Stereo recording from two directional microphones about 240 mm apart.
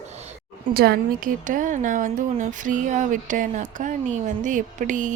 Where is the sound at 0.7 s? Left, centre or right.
Right.